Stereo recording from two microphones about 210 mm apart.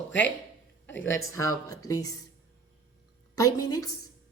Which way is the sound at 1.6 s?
15° left (ahead or behind).